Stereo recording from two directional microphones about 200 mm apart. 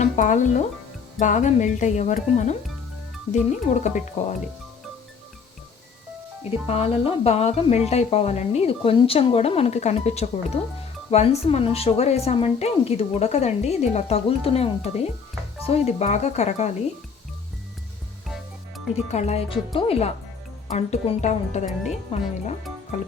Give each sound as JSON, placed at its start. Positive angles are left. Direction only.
{"t": 0.0, "sound": "a woman's voice", "side_deg": 40}
{"t": 6.5, "sound": "a woman's voice", "side_deg": 30}
{"t": 19.1, "sound": "a woman's voice", "side_deg": 30}